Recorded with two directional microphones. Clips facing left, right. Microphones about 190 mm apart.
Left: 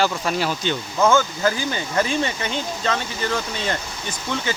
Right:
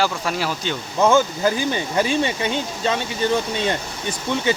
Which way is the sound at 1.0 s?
15° right (ahead or behind).